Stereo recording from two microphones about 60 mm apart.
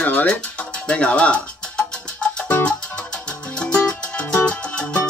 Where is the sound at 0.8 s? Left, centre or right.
Centre.